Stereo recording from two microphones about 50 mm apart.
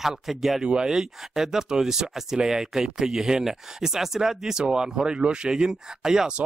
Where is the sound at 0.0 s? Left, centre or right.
Centre.